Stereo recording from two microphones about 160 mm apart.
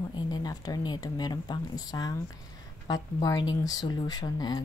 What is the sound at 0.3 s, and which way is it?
Speech, 25° left (ahead or behind).